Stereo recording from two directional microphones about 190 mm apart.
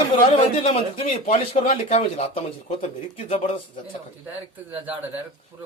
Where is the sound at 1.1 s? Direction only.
45° left (ahead or behind).